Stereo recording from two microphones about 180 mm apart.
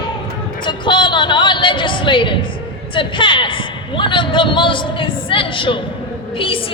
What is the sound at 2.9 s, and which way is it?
A man's voice, 25° left (ahead or behind).